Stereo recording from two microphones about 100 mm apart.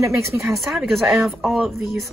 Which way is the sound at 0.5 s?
Centre (ahead or behind).